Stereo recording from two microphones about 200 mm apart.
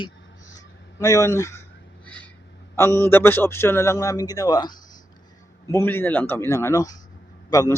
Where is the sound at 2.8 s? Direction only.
10° left (ahead or behind).